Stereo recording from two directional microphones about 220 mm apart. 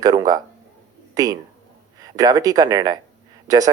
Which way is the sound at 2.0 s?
15° right (ahead or behind).